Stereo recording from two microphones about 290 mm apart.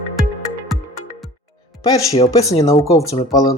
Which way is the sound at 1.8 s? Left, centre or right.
Centre.